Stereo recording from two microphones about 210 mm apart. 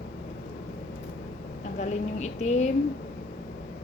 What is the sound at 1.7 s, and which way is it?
Speech, 35° left (ahead or behind).